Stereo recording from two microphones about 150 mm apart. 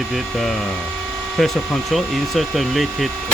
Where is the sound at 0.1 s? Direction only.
Centre (ahead or behind).